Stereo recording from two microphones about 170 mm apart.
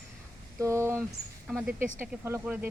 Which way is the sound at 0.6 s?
15° right (ahead or behind).